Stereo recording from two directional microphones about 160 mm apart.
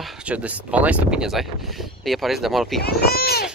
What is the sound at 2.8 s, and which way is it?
Speech, 75° left (ahead or behind).